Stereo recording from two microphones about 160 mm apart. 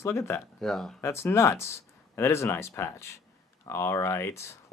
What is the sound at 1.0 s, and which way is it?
Speech, 15° left (ahead or behind).